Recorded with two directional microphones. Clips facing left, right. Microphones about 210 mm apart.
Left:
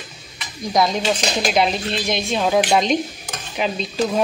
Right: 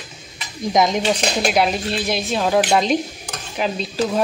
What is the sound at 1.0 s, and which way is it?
Speech, 55° right (ahead or behind).